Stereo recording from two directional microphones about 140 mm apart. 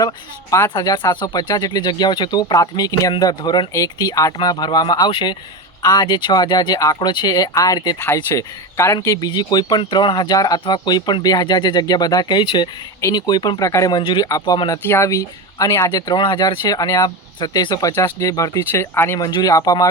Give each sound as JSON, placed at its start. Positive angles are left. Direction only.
{"t": 0.7, "sound": "speech", "side_deg": 30}